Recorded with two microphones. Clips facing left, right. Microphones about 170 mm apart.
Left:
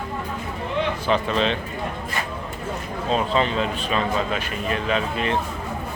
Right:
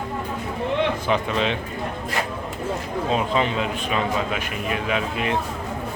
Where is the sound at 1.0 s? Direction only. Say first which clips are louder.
Left 1 dB; 15° right (ahead or behind).